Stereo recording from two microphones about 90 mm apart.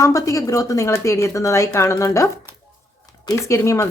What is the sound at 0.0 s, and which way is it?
A woman's voice, 35° left (ahead or behind).